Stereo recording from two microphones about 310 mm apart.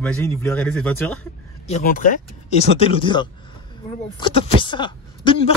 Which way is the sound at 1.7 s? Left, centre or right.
Left.